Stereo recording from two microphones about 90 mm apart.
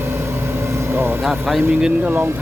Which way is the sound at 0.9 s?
25° right (ahead or behind).